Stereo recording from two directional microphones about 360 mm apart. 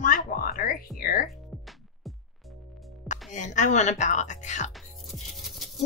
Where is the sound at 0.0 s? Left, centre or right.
Left.